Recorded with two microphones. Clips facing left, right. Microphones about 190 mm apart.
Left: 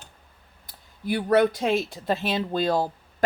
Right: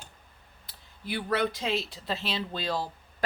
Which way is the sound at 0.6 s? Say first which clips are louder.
Left 9 dB; 45° left (ahead or behind).